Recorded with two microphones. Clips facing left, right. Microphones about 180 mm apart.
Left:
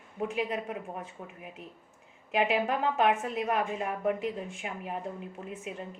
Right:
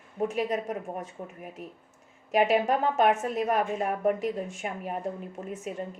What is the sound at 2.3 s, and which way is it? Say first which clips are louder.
A woman's voice: right 4 dB; 40° right (ahead or behind).